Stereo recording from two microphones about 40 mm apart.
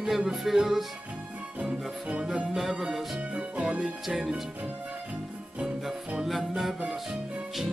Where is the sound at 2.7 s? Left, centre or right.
Centre.